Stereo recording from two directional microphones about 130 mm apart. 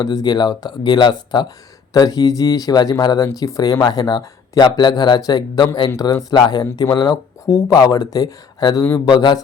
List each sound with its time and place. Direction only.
0.0 s speech: 30° left (ahead or behind)